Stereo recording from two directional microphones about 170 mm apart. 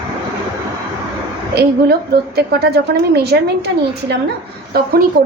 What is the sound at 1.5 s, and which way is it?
A woman's voice, 70° right (ahead or behind).